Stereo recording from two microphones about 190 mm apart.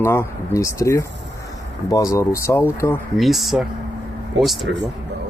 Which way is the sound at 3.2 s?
Centre (ahead or behind).